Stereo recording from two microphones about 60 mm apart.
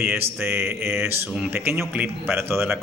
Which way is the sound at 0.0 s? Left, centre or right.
Right.